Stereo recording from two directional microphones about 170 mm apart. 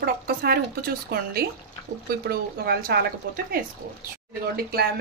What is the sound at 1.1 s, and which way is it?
Speech, 65° right (ahead or behind).